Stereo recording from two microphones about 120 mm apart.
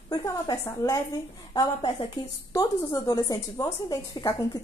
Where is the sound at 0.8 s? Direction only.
25° left (ahead or behind).